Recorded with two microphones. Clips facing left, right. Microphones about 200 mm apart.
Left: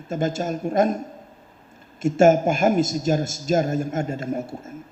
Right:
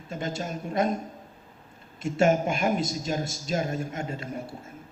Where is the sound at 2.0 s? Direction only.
45° left (ahead or behind).